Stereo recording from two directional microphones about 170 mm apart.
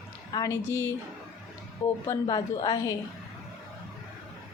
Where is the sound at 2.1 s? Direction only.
25° left (ahead or behind).